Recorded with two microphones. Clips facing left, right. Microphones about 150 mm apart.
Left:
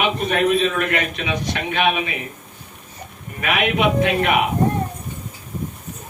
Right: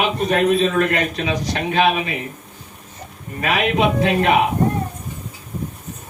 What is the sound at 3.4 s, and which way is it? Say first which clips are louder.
Speech: right 1 dB; 35° right (ahead or behind).